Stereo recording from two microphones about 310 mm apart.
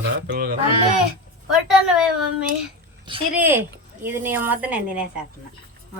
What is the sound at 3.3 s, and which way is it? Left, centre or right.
Speech, centre.